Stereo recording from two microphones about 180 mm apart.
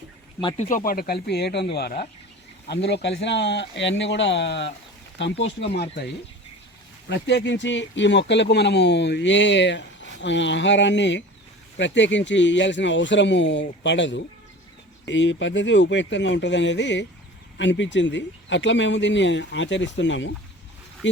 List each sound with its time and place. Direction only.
0.4 s speech: 40° left (ahead or behind); by 2.0 s 60° left (ahead or behind)
2.6 s speech: 70° left (ahead or behind)
7.1 s speech: 75° left (ahead or behind)